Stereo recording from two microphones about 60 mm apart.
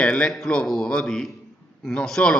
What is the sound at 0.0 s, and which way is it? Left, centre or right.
A man's voice, centre.